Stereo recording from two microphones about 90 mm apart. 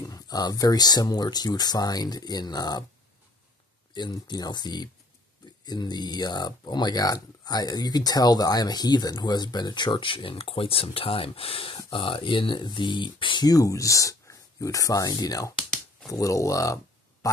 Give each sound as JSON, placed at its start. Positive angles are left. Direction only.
{"t": 0.0, "sound": "speech", "side_deg": 45}
{"t": 3.9, "sound": "speech", "side_deg": 55}
{"t": 13.5, "sound": "speech", "side_deg": 40}